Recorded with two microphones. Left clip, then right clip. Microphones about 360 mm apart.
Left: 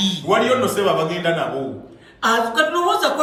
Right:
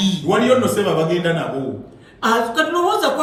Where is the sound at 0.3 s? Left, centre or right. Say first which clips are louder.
Right 2 dB; centre.